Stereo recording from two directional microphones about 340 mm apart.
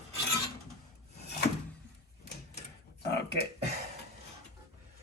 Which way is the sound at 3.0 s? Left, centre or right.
Left.